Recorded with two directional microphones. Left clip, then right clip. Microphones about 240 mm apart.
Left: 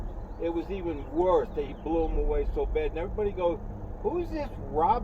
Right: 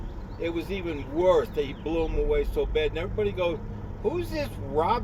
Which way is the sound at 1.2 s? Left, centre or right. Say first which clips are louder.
Right 3 dB; centre.